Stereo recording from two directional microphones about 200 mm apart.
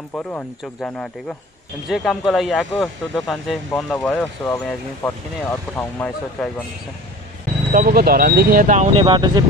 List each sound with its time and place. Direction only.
0.1 s speech: 10° left (ahead or behind)
7.7 s speech: 50° right (ahead or behind)
9.0 s speech: 20° right (ahead or behind)